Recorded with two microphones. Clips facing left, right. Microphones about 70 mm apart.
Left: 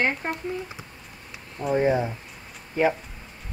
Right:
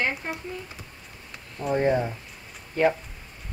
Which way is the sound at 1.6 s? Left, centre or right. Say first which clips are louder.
Left 1 dB; centre.